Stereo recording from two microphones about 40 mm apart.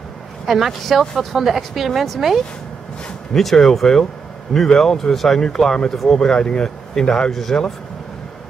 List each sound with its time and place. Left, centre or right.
0.5 s speech: centre